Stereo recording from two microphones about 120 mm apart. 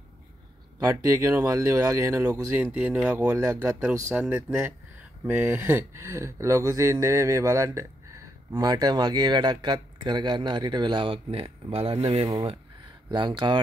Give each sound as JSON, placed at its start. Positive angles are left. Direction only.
{"t": 0.7, "sound": "speech", "side_deg": -30}
{"t": 13.1, "sound": "speech", "side_deg": -40}